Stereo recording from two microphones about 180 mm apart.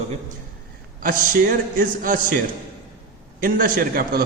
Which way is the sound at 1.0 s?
50° right (ahead or behind).